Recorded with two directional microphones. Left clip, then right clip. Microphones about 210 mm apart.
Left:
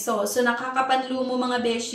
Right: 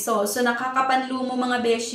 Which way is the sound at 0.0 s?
10° right (ahead or behind).